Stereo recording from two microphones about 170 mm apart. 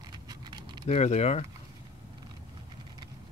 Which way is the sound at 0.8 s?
40° left (ahead or behind).